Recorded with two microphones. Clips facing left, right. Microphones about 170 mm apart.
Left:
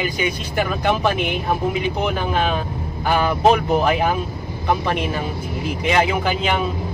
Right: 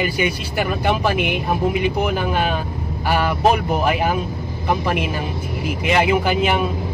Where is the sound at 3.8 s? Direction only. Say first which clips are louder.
Even; 10° right (ahead or behind).